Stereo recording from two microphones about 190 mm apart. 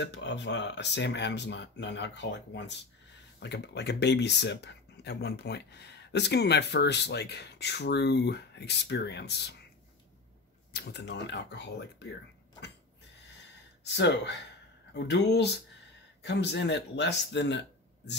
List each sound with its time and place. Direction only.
0.0 s speech: 65° left (ahead or behind)
10.7 s speech: 60° left (ahead or behind)
13.8 s speech: 65° left (ahead or behind)